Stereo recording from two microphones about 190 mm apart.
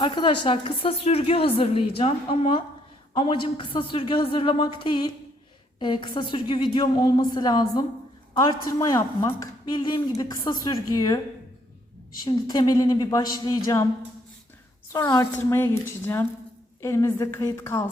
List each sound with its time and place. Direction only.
0.0 s a woman's voice: 25° left (ahead or behind)
12.2 s speech: 20° left (ahead or behind)
14.9 s a woman's voice: 15° left (ahead or behind)
16.8 s a woman's voice: 15° left (ahead or behind)